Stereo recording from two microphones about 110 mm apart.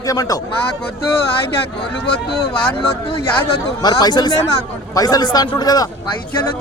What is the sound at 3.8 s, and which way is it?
A man's voice, 40° left (ahead or behind).